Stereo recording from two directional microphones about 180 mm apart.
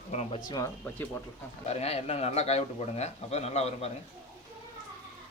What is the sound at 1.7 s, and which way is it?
A man's voice, 35° left (ahead or behind).